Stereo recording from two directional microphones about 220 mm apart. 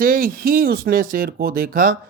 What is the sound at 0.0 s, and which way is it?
Speech, 40° right (ahead or behind).